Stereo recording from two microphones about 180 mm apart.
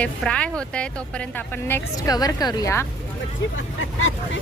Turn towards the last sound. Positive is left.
turn(degrees=90)